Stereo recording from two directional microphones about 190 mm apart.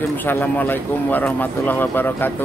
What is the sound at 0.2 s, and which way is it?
Speech, 10° left (ahead or behind).